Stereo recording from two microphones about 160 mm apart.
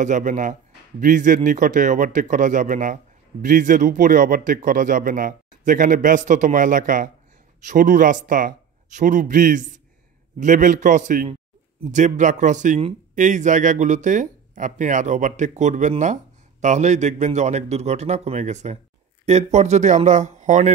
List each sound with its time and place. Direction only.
0.0 s speech: 50° right (ahead or behind)